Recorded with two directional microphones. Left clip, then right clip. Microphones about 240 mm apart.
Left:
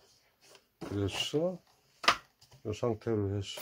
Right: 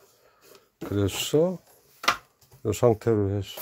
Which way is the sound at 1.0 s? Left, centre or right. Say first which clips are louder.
Right 9 dB; right.